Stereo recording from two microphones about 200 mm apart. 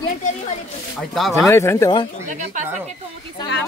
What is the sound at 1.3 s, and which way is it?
Speech, 15° left (ahead or behind).